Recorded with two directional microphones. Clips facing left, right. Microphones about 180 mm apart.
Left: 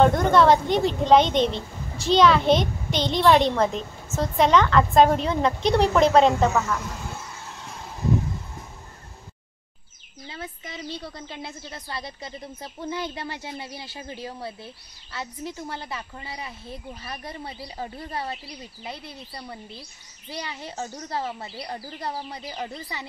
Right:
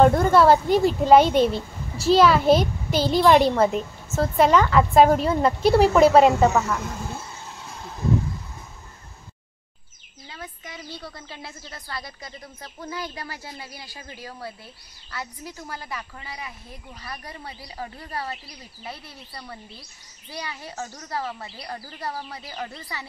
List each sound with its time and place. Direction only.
0.0 s speech: 5° right (ahead or behind)
10.3 s a woman's voice: 25° left (ahead or behind)